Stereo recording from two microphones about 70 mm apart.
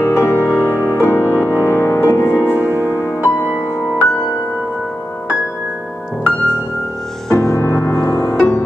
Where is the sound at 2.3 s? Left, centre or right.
Right.